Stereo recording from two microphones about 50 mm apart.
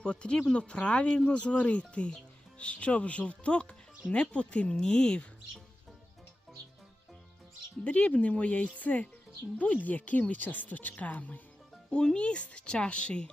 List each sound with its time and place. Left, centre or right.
0.0 s speech: centre
7.9 s speech: left
11.9 s speech: centre